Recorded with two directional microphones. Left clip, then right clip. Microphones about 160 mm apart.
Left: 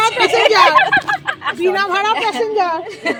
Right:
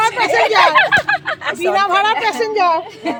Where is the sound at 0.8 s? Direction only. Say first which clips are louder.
Even; 85° right.